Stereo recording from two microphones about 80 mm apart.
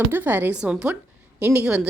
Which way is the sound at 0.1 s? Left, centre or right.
Right.